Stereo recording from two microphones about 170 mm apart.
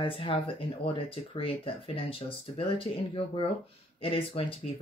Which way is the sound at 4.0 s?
30° left (ahead or behind).